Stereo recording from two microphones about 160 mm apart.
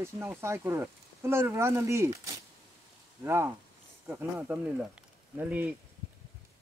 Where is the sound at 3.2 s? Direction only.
15° right (ahead or behind).